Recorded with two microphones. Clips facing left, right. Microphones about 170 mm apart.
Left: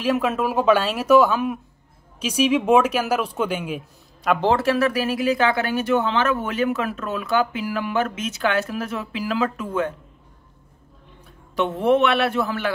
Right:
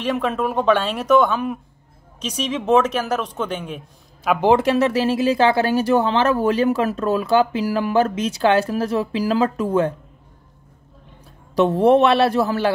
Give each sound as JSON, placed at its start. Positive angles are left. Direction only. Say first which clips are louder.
{"t": 0.0, "sound": "speech", "louder": "even", "side_deg": 5}
{"t": 4.5, "sound": "speech", "louder": "right 4 dB", "side_deg": -20}
{"t": 11.5, "sound": "speech", "louder": "right 5 dB", "side_deg": -35}